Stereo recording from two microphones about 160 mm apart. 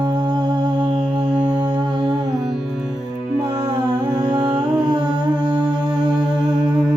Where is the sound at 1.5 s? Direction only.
25° right (ahead or behind).